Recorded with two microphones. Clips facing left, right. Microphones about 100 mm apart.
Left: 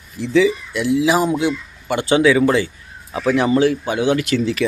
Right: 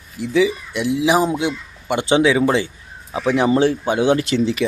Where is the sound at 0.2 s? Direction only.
15° right (ahead or behind).